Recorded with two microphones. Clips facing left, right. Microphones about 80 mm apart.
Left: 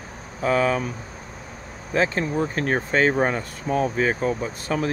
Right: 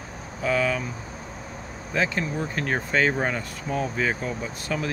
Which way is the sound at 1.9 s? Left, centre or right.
Left.